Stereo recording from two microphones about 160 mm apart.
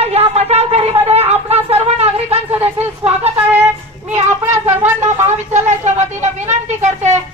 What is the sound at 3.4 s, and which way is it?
Music, 15° right (ahead or behind).